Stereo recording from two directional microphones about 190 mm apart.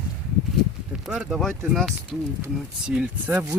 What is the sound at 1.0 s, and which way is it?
Speech, 5° right (ahead or behind).